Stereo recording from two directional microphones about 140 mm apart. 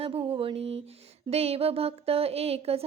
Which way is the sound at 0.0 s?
40° right (ahead or behind).